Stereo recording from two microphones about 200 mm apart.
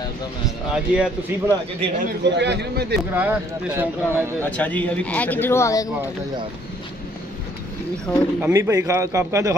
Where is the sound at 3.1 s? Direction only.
10° right (ahead or behind).